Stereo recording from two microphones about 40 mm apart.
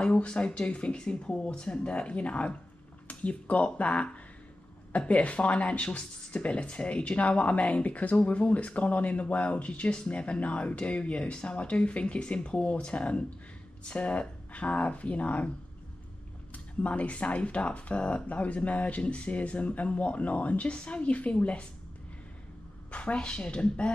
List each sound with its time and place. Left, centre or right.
0.0 s speech: left
16.5 s speech: left
22.8 s a sound: left
23.1 s speech: left